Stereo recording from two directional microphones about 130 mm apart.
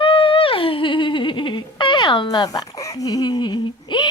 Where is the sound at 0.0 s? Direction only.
45° left (ahead or behind).